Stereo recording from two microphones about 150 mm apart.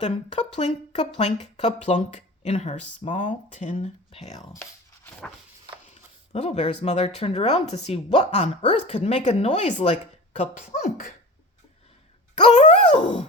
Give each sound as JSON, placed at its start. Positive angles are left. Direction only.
{"t": 0.0, "sound": "speech", "side_deg": 50}
{"t": 4.5, "sound": "a sound", "side_deg": 15}
{"t": 6.3, "sound": "speech", "side_deg": 45}
{"t": 12.5, "sound": "speech", "side_deg": 50}